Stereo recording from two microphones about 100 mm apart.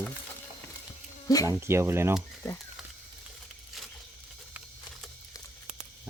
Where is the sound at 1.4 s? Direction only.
25° right (ahead or behind).